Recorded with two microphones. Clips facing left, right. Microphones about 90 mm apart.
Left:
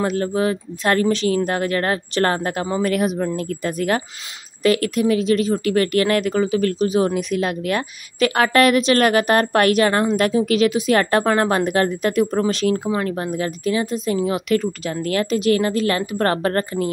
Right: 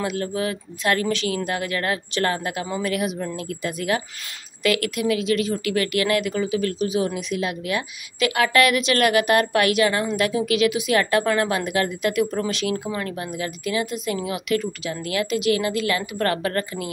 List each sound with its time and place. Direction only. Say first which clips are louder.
0.0 s speech: left 5 dB; 40° left (ahead or behind)